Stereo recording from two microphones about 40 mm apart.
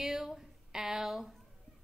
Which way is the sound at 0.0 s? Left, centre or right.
Centre.